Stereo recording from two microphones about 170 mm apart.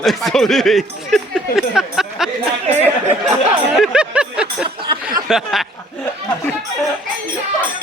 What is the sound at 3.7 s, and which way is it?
A man's voice, centre (ahead or behind).